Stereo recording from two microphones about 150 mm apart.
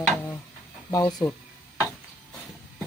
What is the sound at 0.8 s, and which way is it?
Speech, 20° left (ahead or behind).